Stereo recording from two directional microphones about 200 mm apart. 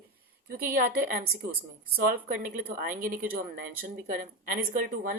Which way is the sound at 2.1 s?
45° right (ahead or behind).